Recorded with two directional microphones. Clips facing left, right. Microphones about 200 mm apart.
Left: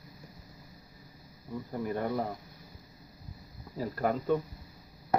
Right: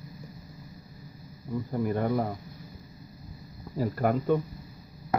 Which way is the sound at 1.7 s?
5° right (ahead or behind).